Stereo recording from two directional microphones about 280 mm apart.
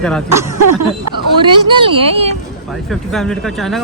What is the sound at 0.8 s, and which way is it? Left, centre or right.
Speech, right.